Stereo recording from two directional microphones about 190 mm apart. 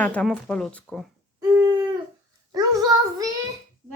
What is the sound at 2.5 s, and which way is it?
Child singing, 20° right (ahead or behind).